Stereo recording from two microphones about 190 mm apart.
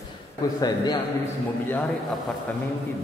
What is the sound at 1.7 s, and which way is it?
Speech, 10° left (ahead or behind).